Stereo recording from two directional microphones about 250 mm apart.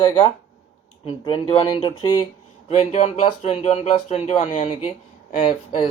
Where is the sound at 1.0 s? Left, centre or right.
Left.